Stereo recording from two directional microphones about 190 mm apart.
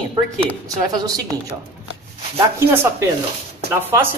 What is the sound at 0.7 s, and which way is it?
Speech, 20° right (ahead or behind).